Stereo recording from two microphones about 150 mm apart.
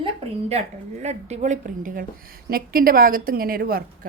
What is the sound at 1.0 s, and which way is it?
Speech, 50° right (ahead or behind).